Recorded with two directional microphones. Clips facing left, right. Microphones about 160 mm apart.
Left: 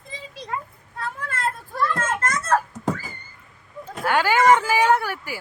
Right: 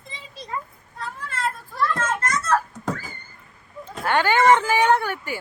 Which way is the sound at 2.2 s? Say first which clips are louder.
Even; 50° left (ahead or behind).